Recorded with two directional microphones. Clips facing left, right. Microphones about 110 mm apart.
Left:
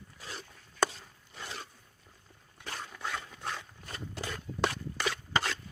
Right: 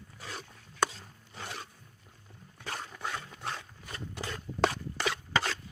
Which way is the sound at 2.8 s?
5° right (ahead or behind).